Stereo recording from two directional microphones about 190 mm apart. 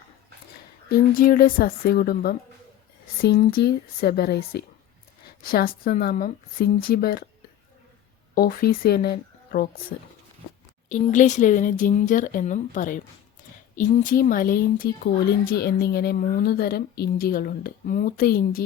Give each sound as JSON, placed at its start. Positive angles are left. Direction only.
{"t": 0.9, "sound": "a woman's voice", "side_deg": 45}
{"t": 8.4, "sound": "speech", "side_deg": 50}
{"t": 10.8, "sound": "speech", "side_deg": 40}